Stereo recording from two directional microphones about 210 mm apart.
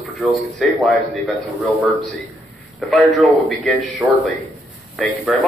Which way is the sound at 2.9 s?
Centre (ahead or behind).